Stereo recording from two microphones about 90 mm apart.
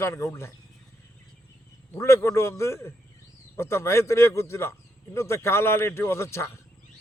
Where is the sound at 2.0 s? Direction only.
30° left (ahead or behind).